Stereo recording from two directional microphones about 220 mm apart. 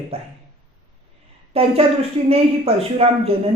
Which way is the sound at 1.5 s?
25° right (ahead or behind).